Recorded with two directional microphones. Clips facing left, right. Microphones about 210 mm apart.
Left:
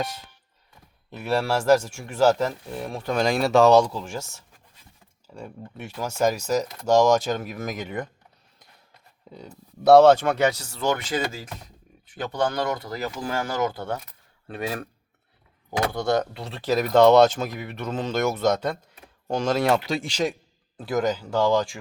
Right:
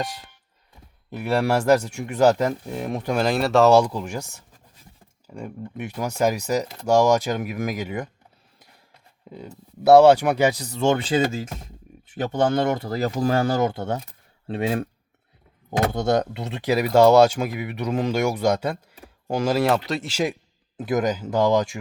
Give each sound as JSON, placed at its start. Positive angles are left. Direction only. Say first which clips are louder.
{"t": 1.1, "sound": "speech", "louder": "right 3 dB", "side_deg": -15}
{"t": 3.2, "sound": "speech", "louder": "even", "side_deg": 0}
{"t": 9.3, "sound": "speech", "louder": "right 4 dB", "side_deg": -5}
{"t": 15.9, "sound": "speech", "louder": "right 1 dB", "side_deg": -20}
{"t": 20.7, "sound": "speech", "louder": "right 2 dB", "side_deg": -20}